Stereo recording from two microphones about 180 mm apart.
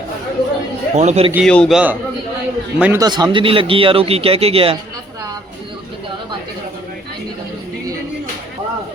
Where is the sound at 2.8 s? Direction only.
15° right (ahead or behind).